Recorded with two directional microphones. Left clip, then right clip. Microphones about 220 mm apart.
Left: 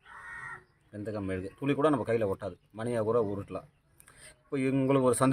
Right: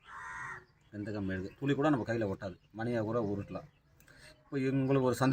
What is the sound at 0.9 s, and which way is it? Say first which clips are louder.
A man's voice: left 4 dB; 50° left (ahead or behind).